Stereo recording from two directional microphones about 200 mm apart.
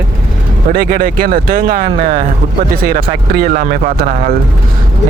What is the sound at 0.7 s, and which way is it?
Speech, 45° right (ahead or behind).